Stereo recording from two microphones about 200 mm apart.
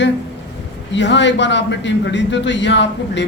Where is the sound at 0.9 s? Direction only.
60° left (ahead or behind).